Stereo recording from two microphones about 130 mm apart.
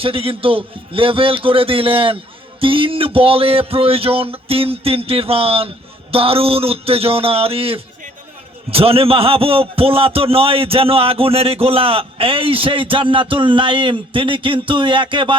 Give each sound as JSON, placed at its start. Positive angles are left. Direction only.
{"t": 0.0, "sound": "a man's voice", "side_deg": -45}